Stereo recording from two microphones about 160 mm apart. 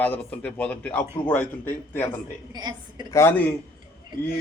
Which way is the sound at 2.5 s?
25° right (ahead or behind).